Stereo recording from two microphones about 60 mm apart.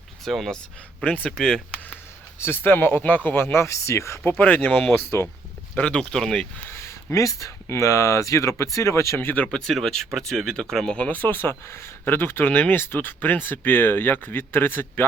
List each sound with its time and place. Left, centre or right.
0.3 s speech: centre
1.0 s speech: left
1.4 s speech: centre
2.4 s speech: left
4.3 s speech: left
5.7 s speech: centre
6.7 s a sound: left
7.7 s speech: left
9.2 s speech: left
9.5 s speech: centre
10.9 s speech: centre
11.2 s speech: left